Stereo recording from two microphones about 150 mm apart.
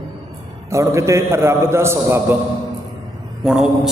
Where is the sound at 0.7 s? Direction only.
20° right (ahead or behind).